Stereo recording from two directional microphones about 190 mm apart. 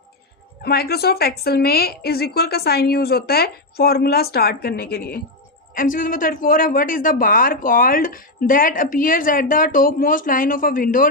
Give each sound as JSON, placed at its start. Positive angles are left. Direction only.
{"t": 0.6, "sound": "a woman's voice", "side_deg": 55}